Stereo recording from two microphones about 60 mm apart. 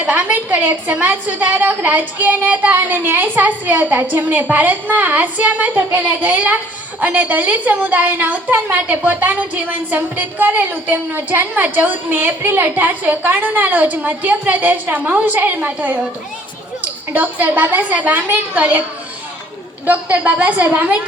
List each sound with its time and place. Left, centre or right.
0.0 s a woman's voice: right
17.1 s a woman's voice: right
19.8 s a woman's voice: right